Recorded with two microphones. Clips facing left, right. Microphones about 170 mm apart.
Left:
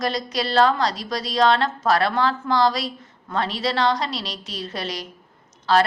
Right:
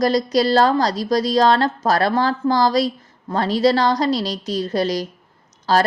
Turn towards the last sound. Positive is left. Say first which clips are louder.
# right 1 dB
turn(degrees=-40)  # may be behind; listen again after turning